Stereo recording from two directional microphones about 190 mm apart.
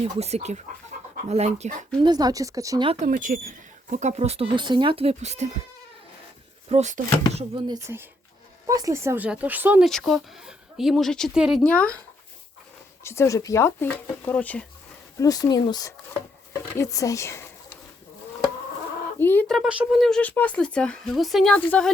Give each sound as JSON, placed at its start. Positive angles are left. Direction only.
{"t": 0.0, "sound": "speech", "side_deg": -35}
{"t": 0.9, "sound": "chicken", "side_deg": -45}
{"t": 1.3, "sound": "speech", "side_deg": -35}
{"t": 2.0, "sound": "a woman's voice", "side_deg": -20}
{"t": 3.1, "sound": "speech", "side_deg": -45}
{"t": 6.7, "sound": "speech", "side_deg": -35}
{"t": 7.5, "sound": "speech", "side_deg": -20}
{"t": 13.1, "sound": "speech", "side_deg": 15}
{"t": 15.2, "sound": "speech", "side_deg": 20}
{"t": 19.2, "sound": "speech", "side_deg": 10}